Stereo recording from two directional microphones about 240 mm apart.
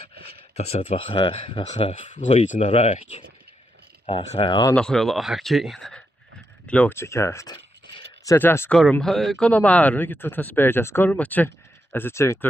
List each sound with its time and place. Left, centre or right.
0.5 s speech: left
4.0 s speech: left
4.7 s speech: centre